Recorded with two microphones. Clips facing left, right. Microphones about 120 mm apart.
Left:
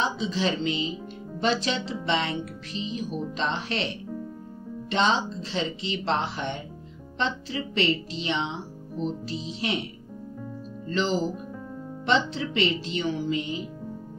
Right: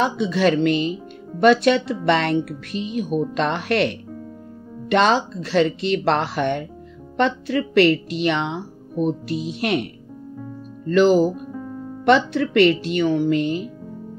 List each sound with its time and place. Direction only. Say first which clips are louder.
0.0 s speech: right 8 dB; 65° right (ahead or behind)
10.9 s speech: right 11 dB; 65° right (ahead or behind)